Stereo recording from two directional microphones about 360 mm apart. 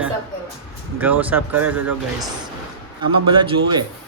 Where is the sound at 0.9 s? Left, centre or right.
Centre.